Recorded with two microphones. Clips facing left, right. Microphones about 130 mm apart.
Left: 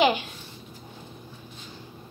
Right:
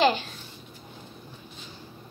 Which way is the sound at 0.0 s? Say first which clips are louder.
Left 1 dB; 15° left (ahead or behind).